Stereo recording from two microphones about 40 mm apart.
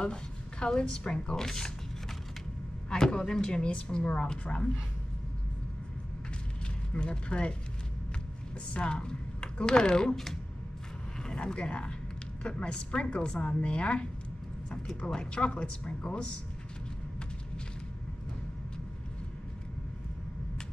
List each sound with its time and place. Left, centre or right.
0.0 s speech: left
2.9 s a woman's voice: centre
6.9 s a woman's voice: left
8.7 s speech: left
11.2 s a woman's voice: left
15.0 s a woman's voice: left